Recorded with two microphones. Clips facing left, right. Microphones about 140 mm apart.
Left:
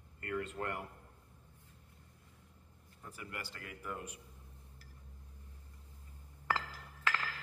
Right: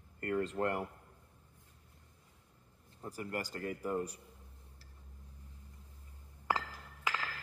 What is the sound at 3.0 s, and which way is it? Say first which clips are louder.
Speech: right 7 dB; 40° right (ahead or behind).